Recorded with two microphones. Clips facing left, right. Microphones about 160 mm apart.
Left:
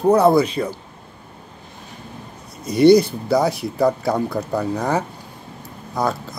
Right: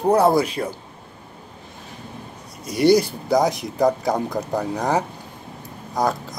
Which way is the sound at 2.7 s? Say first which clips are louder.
Left 4 dB; 10° right (ahead or behind).